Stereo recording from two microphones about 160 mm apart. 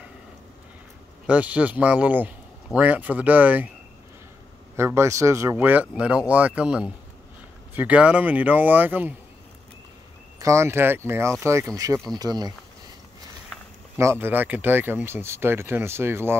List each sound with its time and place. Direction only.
1.2 s speech: 10° right (ahead or behind)
4.7 s speech: 15° right (ahead or behind)
10.4 s speech: 15° right (ahead or behind)
13.9 s speech: 15° right (ahead or behind)